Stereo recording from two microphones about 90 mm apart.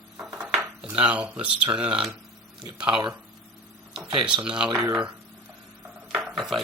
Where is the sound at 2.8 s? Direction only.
65° right (ahead or behind).